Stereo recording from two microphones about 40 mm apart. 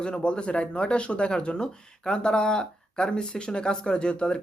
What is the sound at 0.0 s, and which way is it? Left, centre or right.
Speech, left.